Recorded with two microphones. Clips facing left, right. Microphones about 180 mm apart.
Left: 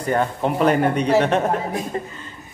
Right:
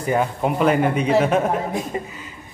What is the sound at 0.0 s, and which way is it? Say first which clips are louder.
Speech: even; 5° right (ahead or behind).